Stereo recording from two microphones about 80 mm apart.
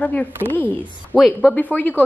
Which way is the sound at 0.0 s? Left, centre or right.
Centre.